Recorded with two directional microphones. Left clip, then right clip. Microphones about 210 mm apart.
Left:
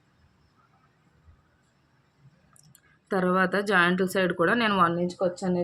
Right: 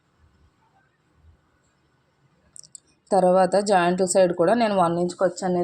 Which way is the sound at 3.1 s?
10° right (ahead or behind).